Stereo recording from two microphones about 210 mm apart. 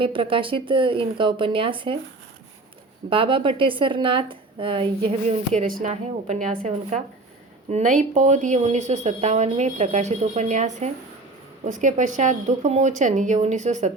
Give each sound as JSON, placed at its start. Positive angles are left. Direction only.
{"t": 0.0, "sound": "a woman's voice", "side_deg": -25}
{"t": 3.1, "sound": "a woman's voice", "side_deg": -25}